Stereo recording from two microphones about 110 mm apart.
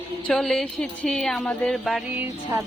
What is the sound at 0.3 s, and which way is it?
Speech, 5° left (ahead or behind).